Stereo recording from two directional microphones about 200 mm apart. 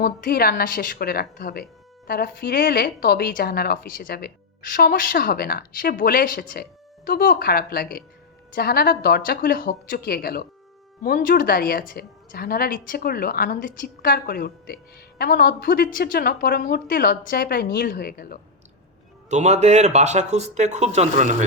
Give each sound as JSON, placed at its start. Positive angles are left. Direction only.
{"t": 0.0, "sound": "a woman's voice", "side_deg": 50}
{"t": 19.3, "sound": "speech", "side_deg": -35}